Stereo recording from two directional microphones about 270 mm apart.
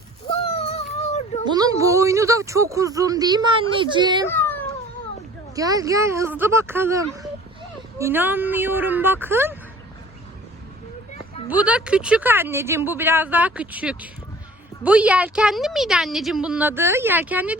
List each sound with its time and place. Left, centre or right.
0.3 s child singing: left
1.5 s speech: centre
4.3 s cat: centre
5.5 s speech: centre
11.4 s a woman's voice: centre